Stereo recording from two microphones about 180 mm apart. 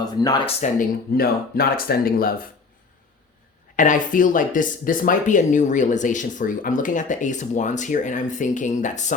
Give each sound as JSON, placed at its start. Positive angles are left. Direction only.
{"t": 0.0, "sound": "speech", "side_deg": 20}
{"t": 0.4, "sound": "speech", "side_deg": 40}
{"t": 1.1, "sound": "speech", "side_deg": 55}
{"t": 3.8, "sound": "speech", "side_deg": 45}